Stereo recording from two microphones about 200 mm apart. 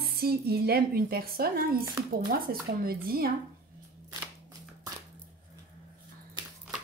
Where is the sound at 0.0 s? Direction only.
50° right (ahead or behind).